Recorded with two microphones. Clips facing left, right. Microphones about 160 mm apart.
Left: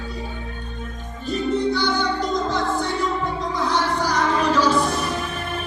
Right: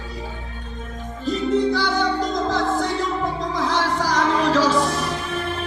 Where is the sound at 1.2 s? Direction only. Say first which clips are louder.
Right 2 dB; 90° right.